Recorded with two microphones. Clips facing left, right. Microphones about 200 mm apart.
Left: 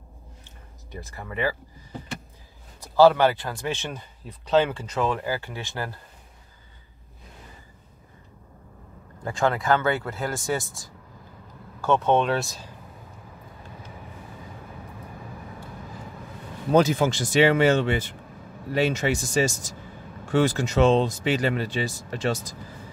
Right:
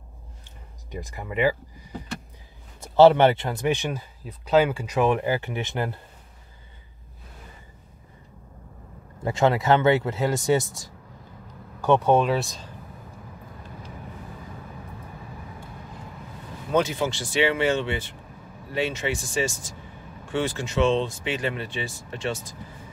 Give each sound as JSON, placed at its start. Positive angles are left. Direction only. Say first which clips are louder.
{"t": 0.9, "sound": "speech", "louder": "right 4 dB", "side_deg": -15}
{"t": 4.2, "sound": "speech", "louder": "right 1 dB", "side_deg": -5}
{"t": 9.2, "sound": "speech", "louder": "right 3 dB", "side_deg": -20}
{"t": 11.8, "sound": "speech", "louder": "right 2 dB", "side_deg": -15}
{"t": 16.7, "sound": "speech", "louder": "left 4 dB", "side_deg": 45}